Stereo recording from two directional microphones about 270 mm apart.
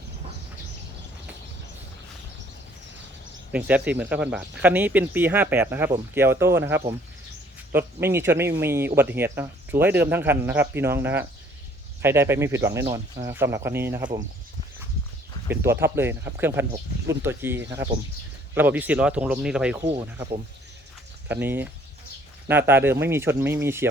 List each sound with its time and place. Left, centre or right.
3.5 s speech: centre
15.4 s speech: centre
19.9 s speech: right
21.4 s speech: centre